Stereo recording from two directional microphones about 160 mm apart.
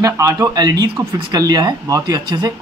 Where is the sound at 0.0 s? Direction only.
20° right (ahead or behind).